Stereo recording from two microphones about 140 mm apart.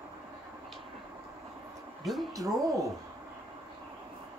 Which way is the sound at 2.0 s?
Centre (ahead or behind).